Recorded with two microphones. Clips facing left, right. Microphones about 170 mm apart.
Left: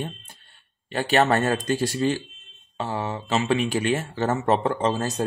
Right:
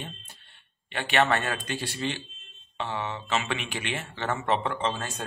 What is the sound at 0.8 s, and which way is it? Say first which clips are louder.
Speech: left 4 dB; 40° left (ahead or behind).